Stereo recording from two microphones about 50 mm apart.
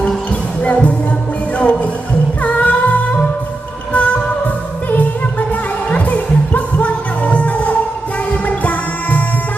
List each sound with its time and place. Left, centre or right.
0.3 s music: left